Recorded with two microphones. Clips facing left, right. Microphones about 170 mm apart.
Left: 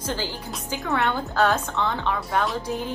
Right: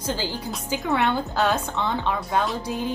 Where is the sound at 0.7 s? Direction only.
15° right (ahead or behind).